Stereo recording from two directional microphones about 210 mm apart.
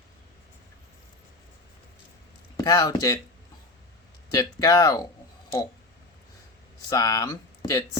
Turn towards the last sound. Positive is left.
turn(degrees=20)  # may be behind; listen again after turning